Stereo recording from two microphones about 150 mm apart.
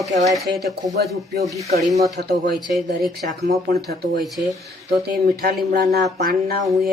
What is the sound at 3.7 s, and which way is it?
Speech, 90° right.